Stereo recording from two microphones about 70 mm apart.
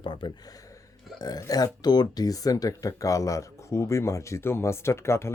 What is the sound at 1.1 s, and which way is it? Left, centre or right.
Speech, left.